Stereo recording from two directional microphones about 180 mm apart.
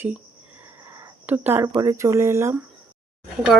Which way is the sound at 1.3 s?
10° right (ahead or behind).